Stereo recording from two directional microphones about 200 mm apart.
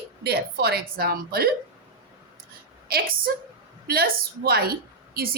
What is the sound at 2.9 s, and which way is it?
A woman's voice, 50° right (ahead or behind).